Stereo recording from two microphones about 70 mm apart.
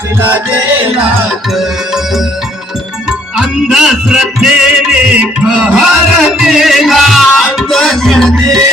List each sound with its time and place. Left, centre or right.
0.2 s music: right
1.3 s music: centre